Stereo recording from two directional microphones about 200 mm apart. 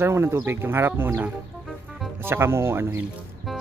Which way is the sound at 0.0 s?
15° right (ahead or behind).